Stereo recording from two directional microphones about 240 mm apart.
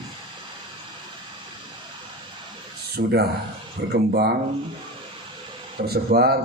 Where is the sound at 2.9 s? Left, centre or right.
Right.